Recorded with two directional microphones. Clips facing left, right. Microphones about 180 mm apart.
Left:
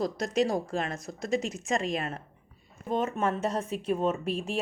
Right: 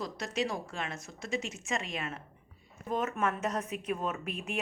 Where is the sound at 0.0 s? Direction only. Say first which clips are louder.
Left 7 dB; 35° left (ahead or behind).